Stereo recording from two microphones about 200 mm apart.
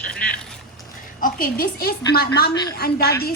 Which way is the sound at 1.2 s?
45° left (ahead or behind).